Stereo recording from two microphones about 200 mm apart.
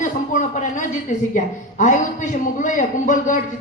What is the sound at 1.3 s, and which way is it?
Speech, 40° left (ahead or behind).